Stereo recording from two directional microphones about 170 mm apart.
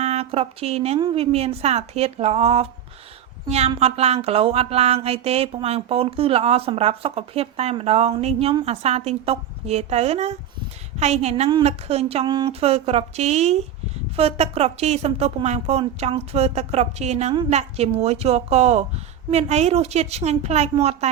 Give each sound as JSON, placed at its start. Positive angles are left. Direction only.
{"t": 0.0, "sound": "speech", "side_deg": -40}
{"t": 3.8, "sound": "speech", "side_deg": -35}